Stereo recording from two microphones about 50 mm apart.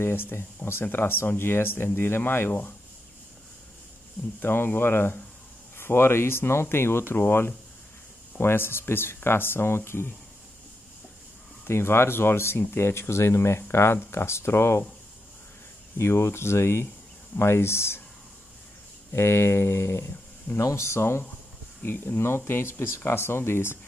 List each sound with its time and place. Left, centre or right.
0.0 s speech: left
4.4 s speech: left
11.6 s speech: left
16.0 s speech: left
19.1 s speech: left
20.5 s speech: left
21.8 s speech: left